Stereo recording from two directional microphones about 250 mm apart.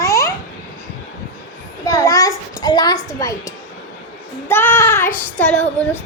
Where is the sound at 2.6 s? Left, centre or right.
Centre.